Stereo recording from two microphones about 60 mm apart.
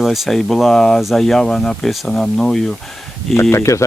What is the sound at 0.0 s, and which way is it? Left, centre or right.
Speech, centre.